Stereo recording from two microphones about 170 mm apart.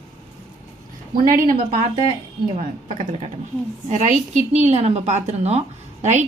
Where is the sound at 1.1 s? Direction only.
55° right (ahead or behind).